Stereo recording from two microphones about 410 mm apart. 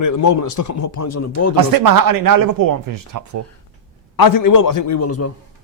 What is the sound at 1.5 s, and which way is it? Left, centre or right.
Speech, right.